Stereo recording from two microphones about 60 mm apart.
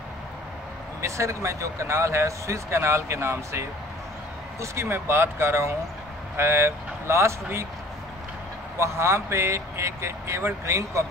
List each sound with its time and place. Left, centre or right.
1.0 s speech: right
8.7 s speech: right